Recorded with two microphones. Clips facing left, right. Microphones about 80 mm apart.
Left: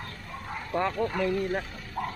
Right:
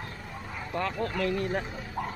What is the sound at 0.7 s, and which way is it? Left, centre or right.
Speech, centre.